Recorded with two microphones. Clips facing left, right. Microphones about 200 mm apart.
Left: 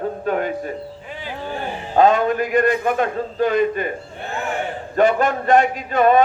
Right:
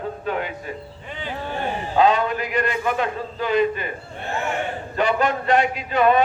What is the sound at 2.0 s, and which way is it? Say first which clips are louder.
A man's voice: left 4 dB; 50° left (ahead or behind).